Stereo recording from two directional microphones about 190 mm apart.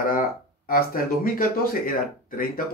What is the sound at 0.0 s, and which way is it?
Speech, 45° left (ahead or behind).